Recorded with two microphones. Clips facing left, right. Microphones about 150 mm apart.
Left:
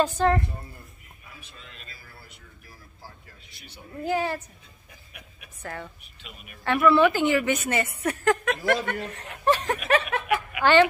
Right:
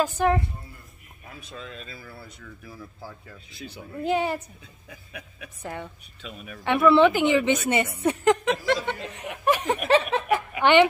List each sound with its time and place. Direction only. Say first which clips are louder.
0.2 s speech: right 1 dB; 15° right (ahead or behind)
4.0 s a woman's voice: right 2 dB; 20° right (ahead or behind)
5.6 s a woman's voice: right 2 dB; 20° right (ahead or behind)
9.8 s snicker: right 3 dB; 30° right (ahead or behind)
10.6 s a woman's voice: right 1 dB; 20° right (ahead or behind)